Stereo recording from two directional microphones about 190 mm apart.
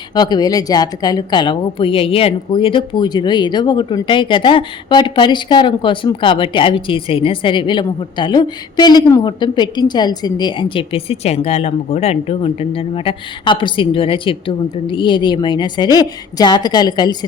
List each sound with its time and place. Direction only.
0.1 s a woman's voice: 20° left (ahead or behind)